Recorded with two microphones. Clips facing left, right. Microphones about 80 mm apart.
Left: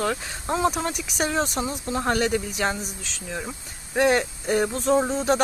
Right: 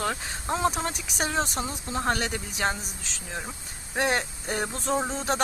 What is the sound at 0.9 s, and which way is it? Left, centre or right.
Speech, right.